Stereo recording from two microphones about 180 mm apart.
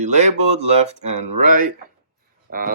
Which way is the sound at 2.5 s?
50° right (ahead or behind).